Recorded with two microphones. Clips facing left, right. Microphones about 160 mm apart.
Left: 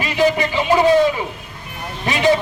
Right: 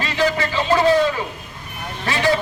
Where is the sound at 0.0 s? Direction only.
15° left (ahead or behind).